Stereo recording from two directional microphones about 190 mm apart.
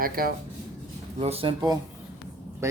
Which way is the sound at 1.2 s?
30° right (ahead or behind).